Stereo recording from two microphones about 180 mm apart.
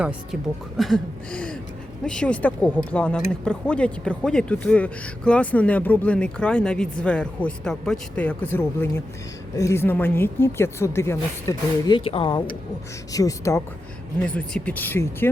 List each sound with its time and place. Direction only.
0.8 s a sound: 5° left (ahead or behind)
2.0 s speech: 5° left (ahead or behind); by 12.4 s 30° left (ahead or behind)
13.1 s speech: 15° left (ahead or behind)
14.2 s speech: 5° left (ahead or behind)